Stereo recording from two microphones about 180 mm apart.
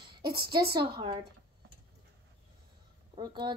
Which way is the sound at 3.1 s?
25° right (ahead or behind).